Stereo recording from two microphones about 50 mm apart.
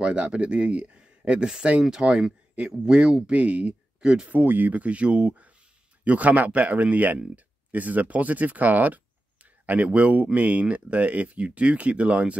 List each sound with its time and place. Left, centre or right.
0.0 s speech: right
4.3 s speech: right